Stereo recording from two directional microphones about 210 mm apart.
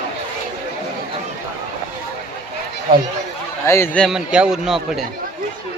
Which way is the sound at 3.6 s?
10° left (ahead or behind).